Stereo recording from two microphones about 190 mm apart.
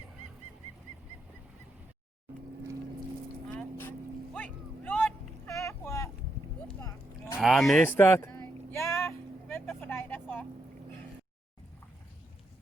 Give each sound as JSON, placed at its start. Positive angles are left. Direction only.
{"t": 3.5, "sound": "boat", "side_deg": 10}
{"t": 6.7, "sound": "a sound", "side_deg": 15}
{"t": 7.3, "sound": "vehicle", "side_deg": 0}